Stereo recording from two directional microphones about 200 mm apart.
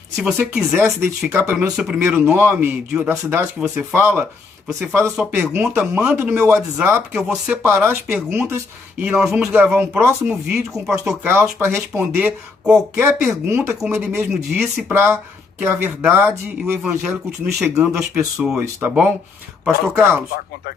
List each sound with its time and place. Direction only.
0.2 s speech: 5° right (ahead or behind)